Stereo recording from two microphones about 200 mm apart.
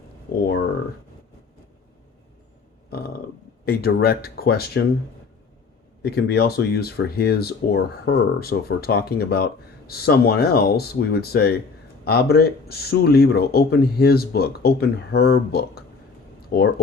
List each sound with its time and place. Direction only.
3.7 s speech: 50° left (ahead or behind)
6.0 s speech: 50° left (ahead or behind)